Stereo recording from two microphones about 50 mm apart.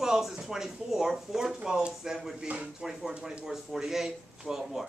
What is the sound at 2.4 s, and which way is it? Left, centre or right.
Speech, right.